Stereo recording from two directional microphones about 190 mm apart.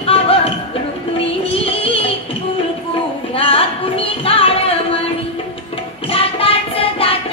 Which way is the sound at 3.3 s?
30° left (ahead or behind).